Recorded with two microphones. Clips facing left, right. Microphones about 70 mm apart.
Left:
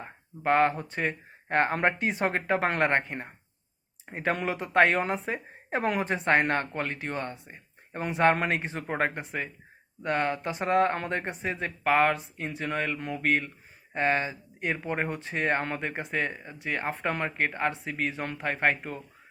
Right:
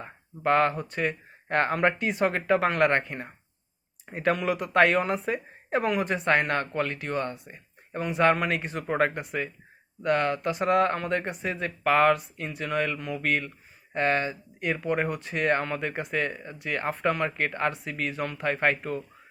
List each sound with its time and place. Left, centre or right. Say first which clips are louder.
0.0 s a woman's voice: right 2 dB; left
7.9 s a man's voice: right 1 dB; left